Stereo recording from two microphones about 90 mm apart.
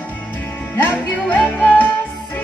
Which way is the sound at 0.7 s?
20° left (ahead or behind).